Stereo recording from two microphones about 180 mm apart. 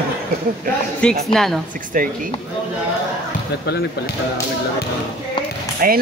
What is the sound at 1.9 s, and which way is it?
Speech, 50° right (ahead or behind).